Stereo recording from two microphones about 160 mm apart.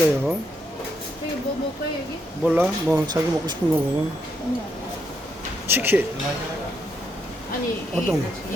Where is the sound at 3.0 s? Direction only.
25° right (ahead or behind).